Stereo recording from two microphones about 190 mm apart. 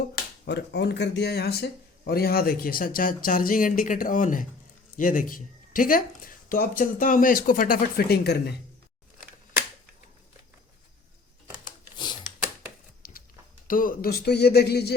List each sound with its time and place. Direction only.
0.4 s speech: 65° left (ahead or behind)
13.0 s biting: 50° left (ahead or behind)
13.7 s speech: 45° left (ahead or behind)